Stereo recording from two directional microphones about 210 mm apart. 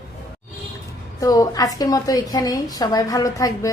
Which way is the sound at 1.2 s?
15° left (ahead or behind).